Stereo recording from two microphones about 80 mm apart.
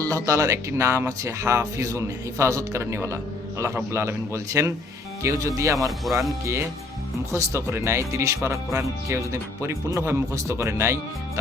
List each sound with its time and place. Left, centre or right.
0.0 s speech: right
6.1 s speech: centre
6.4 s speech: right